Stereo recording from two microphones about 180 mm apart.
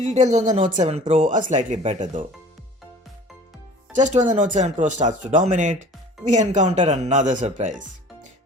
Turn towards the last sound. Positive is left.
turn(degrees=-45)  # may be behind; listen again after turning